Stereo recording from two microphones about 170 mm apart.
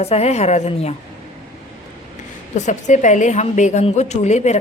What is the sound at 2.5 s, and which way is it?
A woman's voice, 45° left (ahead or behind).